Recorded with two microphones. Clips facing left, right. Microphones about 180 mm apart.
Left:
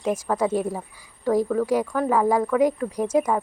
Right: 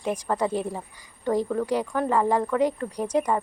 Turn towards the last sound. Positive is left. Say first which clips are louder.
# left 3 dB
turn(degrees=5)  # may be behind; listen again after turning